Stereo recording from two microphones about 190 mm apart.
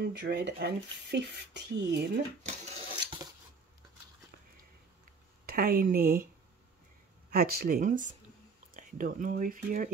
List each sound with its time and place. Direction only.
0.0 s speech: 60° right (ahead or behind)
2.4 s dishes: 35° right (ahead or behind)
5.5 s speech: 50° right (ahead or behind)
7.2 s speech: 55° right (ahead or behind)